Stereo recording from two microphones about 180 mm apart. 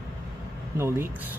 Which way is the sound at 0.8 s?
15° right (ahead or behind).